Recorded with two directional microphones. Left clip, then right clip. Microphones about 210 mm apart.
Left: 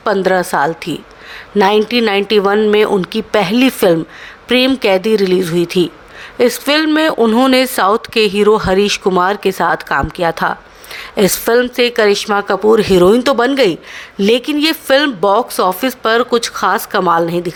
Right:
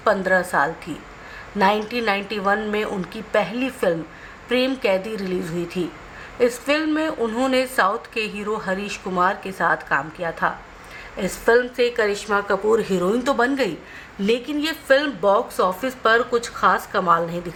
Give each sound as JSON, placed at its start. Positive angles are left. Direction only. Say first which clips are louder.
{"t": 0.0, "sound": "speech", "louder": "left 6 dB", "side_deg": 45}